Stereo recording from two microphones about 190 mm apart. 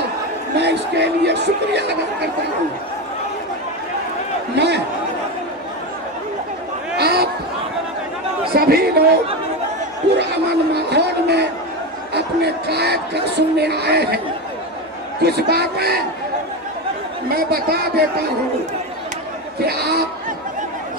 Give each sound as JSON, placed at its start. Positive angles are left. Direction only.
{"t": 0.6, "sound": "speech", "side_deg": -60}
{"t": 4.6, "sound": "speech", "side_deg": -65}
{"t": 7.0, "sound": "a sound", "side_deg": -60}
{"t": 8.5, "sound": "speech", "side_deg": -55}
{"t": 10.7, "sound": "a sound", "side_deg": -60}
{"t": 12.1, "sound": "speech", "side_deg": -60}
{"t": 15.2, "sound": "speech", "side_deg": -60}
{"t": 17.3, "sound": "speech", "side_deg": -50}
{"t": 19.6, "sound": "speech", "side_deg": -55}